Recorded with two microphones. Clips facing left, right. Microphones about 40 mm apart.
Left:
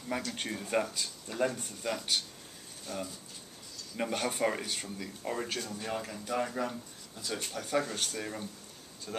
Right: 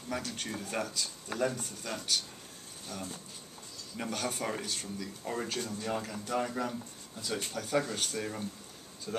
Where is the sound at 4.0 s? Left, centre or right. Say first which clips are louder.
Left 4 dB; centre.